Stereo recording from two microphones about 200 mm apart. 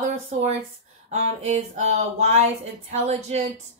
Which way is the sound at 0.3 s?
35° right (ahead or behind).